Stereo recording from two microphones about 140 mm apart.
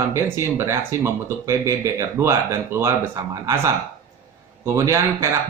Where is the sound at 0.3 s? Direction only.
20° right (ahead or behind).